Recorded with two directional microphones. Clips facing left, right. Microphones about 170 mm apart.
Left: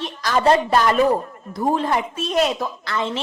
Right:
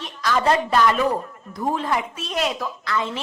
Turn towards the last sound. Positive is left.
turn(degrees=30)  # may be behind; listen again after turning